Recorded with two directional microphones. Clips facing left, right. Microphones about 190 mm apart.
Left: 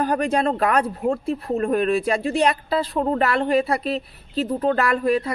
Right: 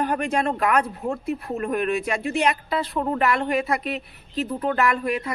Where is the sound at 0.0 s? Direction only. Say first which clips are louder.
Left 3 dB; 35° left (ahead or behind).